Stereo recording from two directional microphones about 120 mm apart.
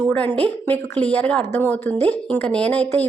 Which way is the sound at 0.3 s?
15° left (ahead or behind).